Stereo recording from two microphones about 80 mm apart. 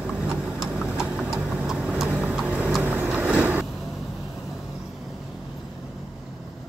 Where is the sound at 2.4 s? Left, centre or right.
Centre.